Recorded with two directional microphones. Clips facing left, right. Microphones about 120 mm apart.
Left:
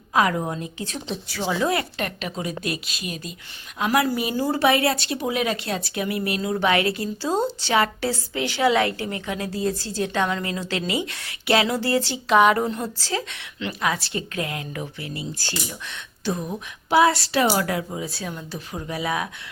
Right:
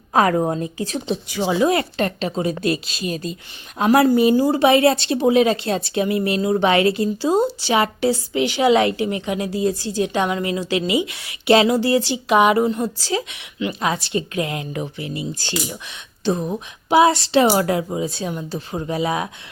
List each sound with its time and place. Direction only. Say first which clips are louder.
0.1 s a woman's voice: right 5 dB; 40° right (ahead or behind)
1.3 s speech: right 5 dB; 15° right (ahead or behind)
1.8 s a woman's voice: right 7 dB; 30° right (ahead or behind)
4.4 s a woman's voice: right 5 dB; 15° right (ahead or behind)
11.4 s speech: right 6 dB; 25° right (ahead or behind)
12.6 s a woman's voice: right 6 dB; 5° right (ahead or behind)
13.0 s a woman's voice: right 4 dB; 15° right (ahead or behind)